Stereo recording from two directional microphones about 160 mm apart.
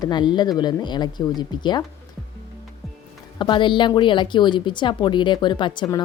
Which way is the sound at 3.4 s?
30° left (ahead or behind).